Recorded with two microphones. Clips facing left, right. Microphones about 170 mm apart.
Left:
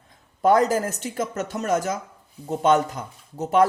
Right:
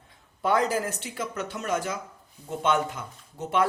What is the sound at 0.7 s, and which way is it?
Speech, 45° left (ahead or behind).